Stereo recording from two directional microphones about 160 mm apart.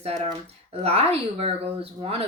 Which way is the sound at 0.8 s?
40° right (ahead or behind).